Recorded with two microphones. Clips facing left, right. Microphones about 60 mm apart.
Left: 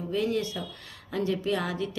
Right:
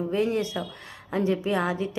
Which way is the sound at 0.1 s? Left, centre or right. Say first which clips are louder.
Even; right.